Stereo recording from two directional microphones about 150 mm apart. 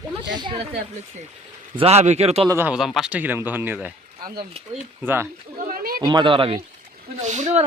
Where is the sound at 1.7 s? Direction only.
40° right (ahead or behind).